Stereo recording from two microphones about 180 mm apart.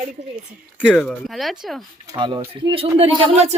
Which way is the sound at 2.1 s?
25° right (ahead or behind).